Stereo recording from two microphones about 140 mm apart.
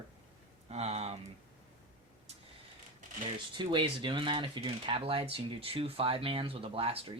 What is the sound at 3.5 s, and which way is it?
Speech, 35° right (ahead or behind).